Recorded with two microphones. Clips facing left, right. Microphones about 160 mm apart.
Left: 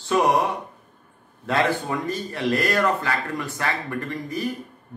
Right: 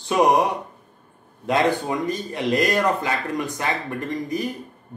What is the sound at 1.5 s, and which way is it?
A man's voice, 15° right (ahead or behind).